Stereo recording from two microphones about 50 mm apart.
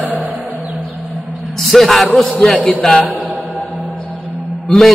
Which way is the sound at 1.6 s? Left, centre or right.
Centre.